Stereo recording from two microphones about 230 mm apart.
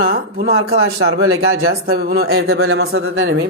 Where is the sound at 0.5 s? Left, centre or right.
Right.